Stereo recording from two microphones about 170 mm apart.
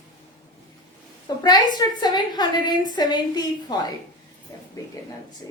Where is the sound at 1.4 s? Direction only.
25° left (ahead or behind).